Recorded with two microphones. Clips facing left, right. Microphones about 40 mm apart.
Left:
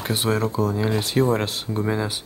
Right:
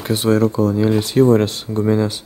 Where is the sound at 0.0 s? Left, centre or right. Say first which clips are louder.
Right 7 dB; centre.